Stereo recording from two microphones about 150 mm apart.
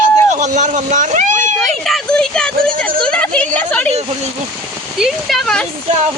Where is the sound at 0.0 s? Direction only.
55° right (ahead or behind).